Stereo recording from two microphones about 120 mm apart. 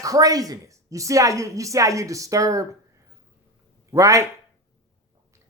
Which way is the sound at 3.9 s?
25° right (ahead or behind).